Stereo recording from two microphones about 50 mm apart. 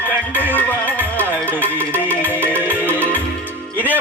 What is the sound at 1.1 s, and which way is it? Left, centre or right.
Music, left.